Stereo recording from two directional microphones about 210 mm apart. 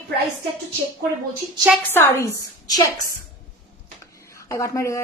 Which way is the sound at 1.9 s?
10° left (ahead or behind).